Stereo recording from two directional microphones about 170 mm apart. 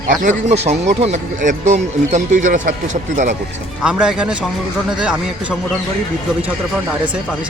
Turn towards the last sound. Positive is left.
turn(degrees=-5)  # may be behind; listen again after turning